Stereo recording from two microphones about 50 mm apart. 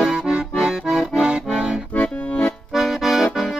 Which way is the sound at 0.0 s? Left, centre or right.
Centre.